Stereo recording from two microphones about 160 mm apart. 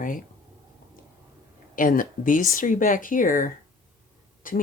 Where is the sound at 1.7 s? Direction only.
60° left (ahead or behind).